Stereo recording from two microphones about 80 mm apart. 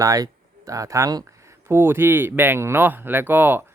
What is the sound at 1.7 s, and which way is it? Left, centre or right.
Speech, right.